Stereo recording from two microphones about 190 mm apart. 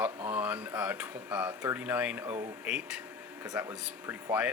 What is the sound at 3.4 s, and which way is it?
Speech, 20° right (ahead or behind).